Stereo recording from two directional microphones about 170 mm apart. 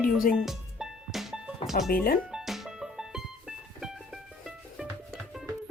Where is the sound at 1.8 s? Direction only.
60° left (ahead or behind).